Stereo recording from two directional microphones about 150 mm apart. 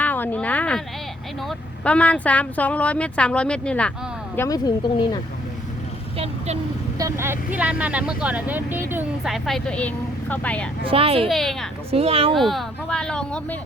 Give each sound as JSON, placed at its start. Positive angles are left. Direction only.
{"t": 0.0, "sound": "a sound", "side_deg": 10}
{"t": 1.5, "sound": "a woman's voice", "side_deg": 10}
{"t": 4.4, "sound": "speech", "side_deg": 25}
{"t": 7.0, "sound": "speech", "side_deg": -15}
{"t": 9.2, "sound": "a woman's voice", "side_deg": 0}
{"t": 10.8, "sound": "speech", "side_deg": -40}
{"t": 11.3, "sound": "speech", "side_deg": 0}
{"t": 11.9, "sound": "speech", "side_deg": -40}
{"t": 12.3, "sound": "speech", "side_deg": 0}